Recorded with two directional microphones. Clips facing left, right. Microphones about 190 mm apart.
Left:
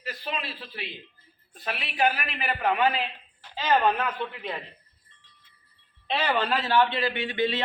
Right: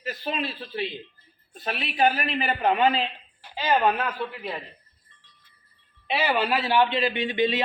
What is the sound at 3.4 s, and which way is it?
A man's voice, 10° right (ahead or behind).